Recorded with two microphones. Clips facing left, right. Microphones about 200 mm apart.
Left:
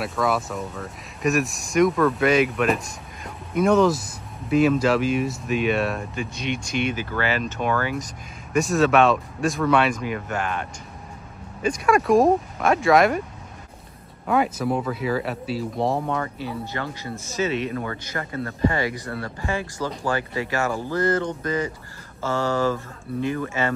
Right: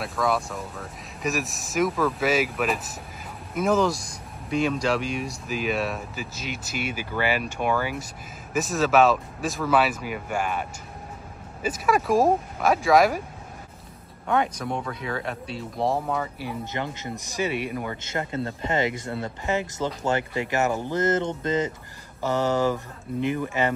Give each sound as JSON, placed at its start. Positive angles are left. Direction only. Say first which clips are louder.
{"t": 0.0, "sound": "speech", "louder": "left 2 dB", "side_deg": 0}
{"t": 14.2, "sound": "speech", "louder": "left 3 dB", "side_deg": 5}
{"t": 18.0, "sound": "speech", "louder": "right 1 dB", "side_deg": -25}